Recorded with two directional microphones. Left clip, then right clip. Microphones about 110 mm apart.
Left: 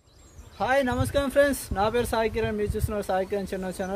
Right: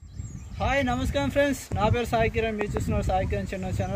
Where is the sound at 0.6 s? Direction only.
45° left (ahead or behind).